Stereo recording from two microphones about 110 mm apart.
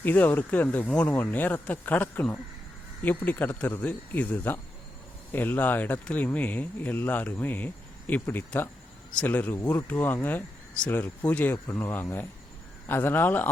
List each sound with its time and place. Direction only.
0.0 s speech: 15° left (ahead or behind)